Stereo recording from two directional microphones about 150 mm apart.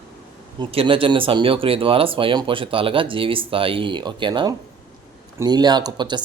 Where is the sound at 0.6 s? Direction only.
35° right (ahead or behind).